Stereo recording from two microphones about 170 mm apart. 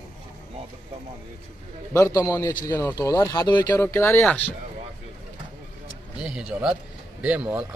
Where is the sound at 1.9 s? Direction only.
15° left (ahead or behind).